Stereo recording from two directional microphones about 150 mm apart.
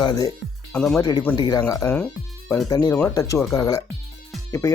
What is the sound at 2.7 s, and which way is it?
Speech, 25° left (ahead or behind).